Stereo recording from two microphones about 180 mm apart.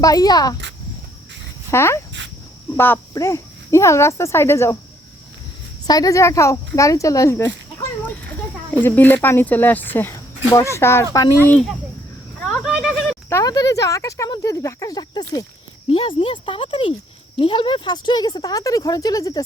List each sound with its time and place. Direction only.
0.0 s speech: 20° left (ahead or behind)
1.7 s speech: 15° left (ahead or behind)
5.8 s speech: 20° left (ahead or behind)
8.7 s speech: 10° left (ahead or behind)
12.4 s a sound: 5° left (ahead or behind)
12.6 s a sound: 5° right (ahead or behind)
13.3 s speech: 20° left (ahead or behind)